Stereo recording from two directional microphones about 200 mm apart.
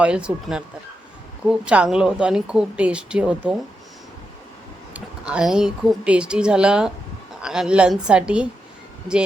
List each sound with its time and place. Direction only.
0.0 s speech: 5° right (ahead or behind)
4.9 s speech: 5° right (ahead or behind)